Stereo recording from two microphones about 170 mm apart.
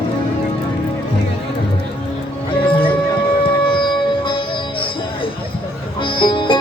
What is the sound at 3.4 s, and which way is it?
Music, 30° left (ahead or behind).